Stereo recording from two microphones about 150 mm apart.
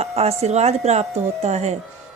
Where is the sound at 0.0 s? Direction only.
45° right (ahead or behind).